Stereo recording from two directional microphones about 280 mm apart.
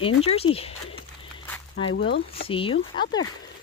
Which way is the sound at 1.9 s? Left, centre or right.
Left.